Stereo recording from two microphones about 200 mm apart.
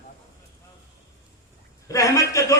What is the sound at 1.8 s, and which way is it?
Speech, 15° left (ahead or behind).